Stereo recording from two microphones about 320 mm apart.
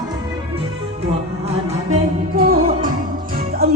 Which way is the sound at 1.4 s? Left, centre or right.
Centre.